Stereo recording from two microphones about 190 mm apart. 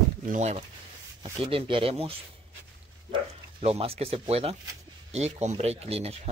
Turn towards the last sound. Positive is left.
turn(degrees=-30)  # may be behind; listen again after turning